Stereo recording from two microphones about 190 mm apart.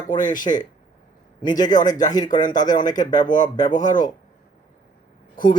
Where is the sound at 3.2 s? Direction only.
40° left (ahead or behind).